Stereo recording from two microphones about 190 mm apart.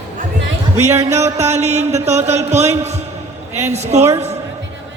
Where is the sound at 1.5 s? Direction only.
35° right (ahead or behind).